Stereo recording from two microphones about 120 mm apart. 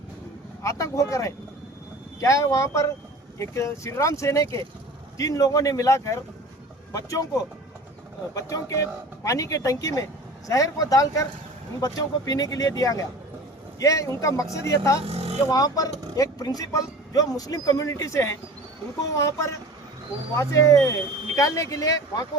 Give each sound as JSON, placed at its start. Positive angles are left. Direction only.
{"t": 0.6, "sound": "speech", "side_deg": 25}
{"t": 8.3, "sound": "speech", "side_deg": 30}
{"t": 15.0, "sound": "vehicle", "side_deg": -60}
{"t": 15.4, "sound": "speech", "side_deg": 30}